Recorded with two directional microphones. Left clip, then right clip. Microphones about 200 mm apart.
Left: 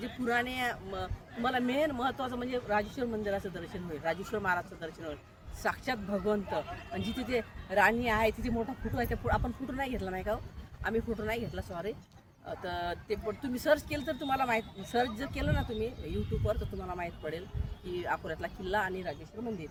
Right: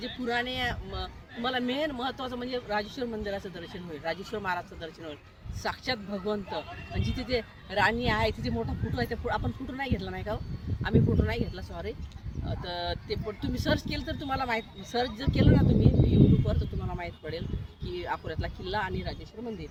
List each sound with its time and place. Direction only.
0.0 s a man's voice: centre (ahead or behind)
10.8 s a man's voice: 10° left (ahead or behind)